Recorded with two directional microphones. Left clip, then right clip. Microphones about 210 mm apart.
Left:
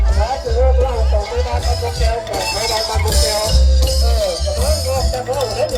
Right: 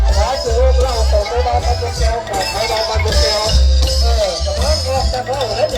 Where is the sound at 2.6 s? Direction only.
55° left (ahead or behind).